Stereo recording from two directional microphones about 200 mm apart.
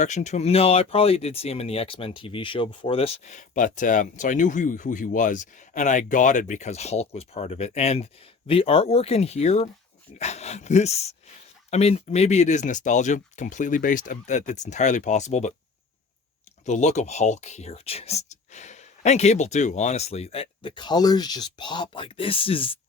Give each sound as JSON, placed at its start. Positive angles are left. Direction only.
{"t": 0.0, "sound": "speech", "side_deg": 35}
{"t": 16.6, "sound": "speech", "side_deg": 35}